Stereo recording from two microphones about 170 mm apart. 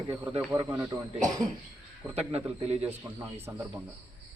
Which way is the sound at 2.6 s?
35° right (ahead or behind).